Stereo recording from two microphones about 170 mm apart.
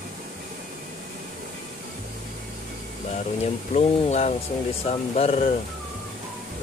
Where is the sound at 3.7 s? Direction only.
40° left (ahead or behind).